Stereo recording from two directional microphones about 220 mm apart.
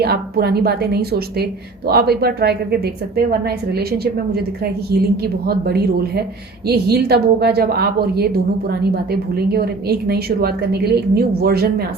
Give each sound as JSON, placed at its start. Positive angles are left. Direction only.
{"t": 0.0, "sound": "a woman's voice", "side_deg": -45}